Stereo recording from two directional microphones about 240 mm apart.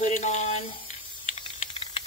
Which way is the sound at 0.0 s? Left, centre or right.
Left.